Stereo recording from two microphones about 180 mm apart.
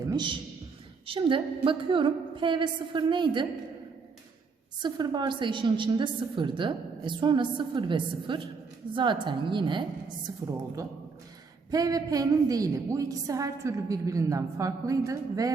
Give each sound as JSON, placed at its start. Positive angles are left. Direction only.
{"t": 0.0, "sound": "a man's voice", "side_deg": -20}
{"t": 4.8, "sound": "a woman's voice", "side_deg": -25}
{"t": 11.7, "sound": "a woman's voice", "side_deg": -20}